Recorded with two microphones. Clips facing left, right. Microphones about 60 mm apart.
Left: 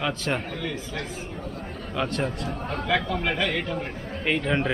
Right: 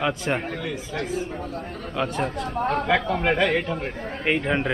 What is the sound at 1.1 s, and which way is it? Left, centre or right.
Speech, right.